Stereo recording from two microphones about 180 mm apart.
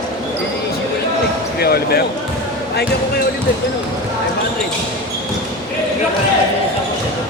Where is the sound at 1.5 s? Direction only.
60° left (ahead or behind).